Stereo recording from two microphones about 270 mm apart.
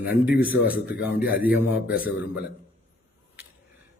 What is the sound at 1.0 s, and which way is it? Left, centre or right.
A man's voice, centre.